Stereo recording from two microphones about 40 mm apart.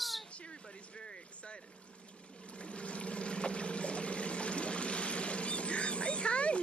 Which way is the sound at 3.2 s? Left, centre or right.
Left.